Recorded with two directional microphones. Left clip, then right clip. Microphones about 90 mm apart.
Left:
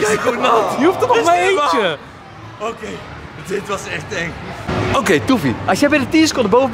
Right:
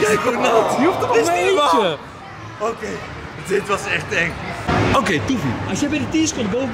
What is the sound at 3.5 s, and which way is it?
Speech, centre (ahead or behind).